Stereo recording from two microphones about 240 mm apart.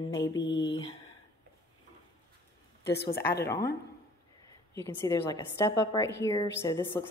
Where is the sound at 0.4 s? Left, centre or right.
Left.